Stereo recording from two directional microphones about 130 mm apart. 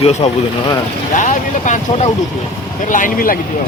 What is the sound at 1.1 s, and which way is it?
Speech, 80° left.